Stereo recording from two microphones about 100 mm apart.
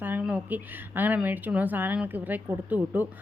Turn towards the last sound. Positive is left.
turn(degrees=-15)  # may be behind; listen again after turning